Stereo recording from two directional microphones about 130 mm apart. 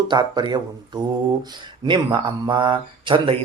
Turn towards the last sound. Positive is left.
turn(degrees=-40)  # may be behind; listen again after turning